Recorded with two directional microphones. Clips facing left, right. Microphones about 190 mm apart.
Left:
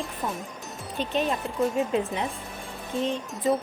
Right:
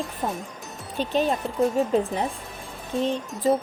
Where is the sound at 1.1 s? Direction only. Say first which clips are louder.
Right 3 dB; 35° right (ahead or behind).